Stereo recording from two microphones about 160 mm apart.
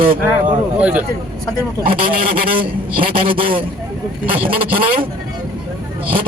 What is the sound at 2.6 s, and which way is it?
Speech, 35° right (ahead or behind).